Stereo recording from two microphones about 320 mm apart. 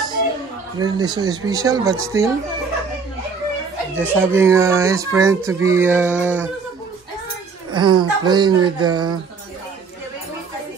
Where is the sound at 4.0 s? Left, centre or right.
Centre.